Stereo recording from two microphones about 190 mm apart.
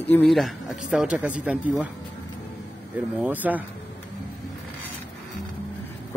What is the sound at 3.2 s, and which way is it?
Speech, 10° right (ahead or behind).